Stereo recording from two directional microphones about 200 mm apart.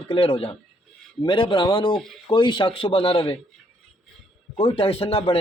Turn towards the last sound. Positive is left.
turn(degrees=30)  # may be behind; listen again after turning